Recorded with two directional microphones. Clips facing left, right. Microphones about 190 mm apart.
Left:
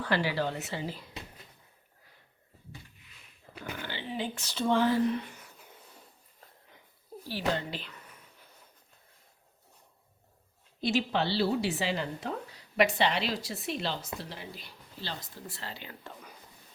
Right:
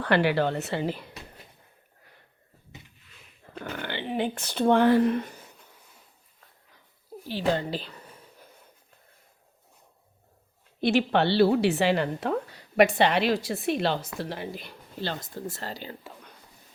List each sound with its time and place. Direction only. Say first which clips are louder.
0.0 s a woman's voice: right 6 dB; 65° right (ahead or behind)
3.6 s speech: right 5 dB; 65° right (ahead or behind)
5.2 s a sound: right 6 dB; 35° right (ahead or behind)
7.1 s a sound: right 3 dB; 10° right (ahead or behind)
7.5 s speech: right 6 dB; 35° right (ahead or behind)
10.8 s a woman's voice: right 6 dB; 60° right (ahead or behind); by 16.0 s 35° right (ahead or behind)